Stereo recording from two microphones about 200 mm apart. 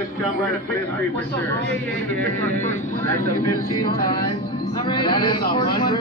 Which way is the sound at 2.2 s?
10° left (ahead or behind).